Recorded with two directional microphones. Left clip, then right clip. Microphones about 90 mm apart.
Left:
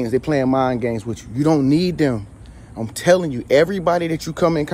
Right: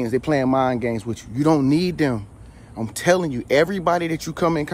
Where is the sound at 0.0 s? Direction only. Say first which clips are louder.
Left 2 dB; 45° right (ahead or behind).